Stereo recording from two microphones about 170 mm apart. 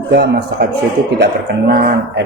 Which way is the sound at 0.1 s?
80° right.